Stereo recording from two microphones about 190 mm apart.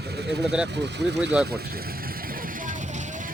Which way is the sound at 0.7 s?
65° right (ahead or behind).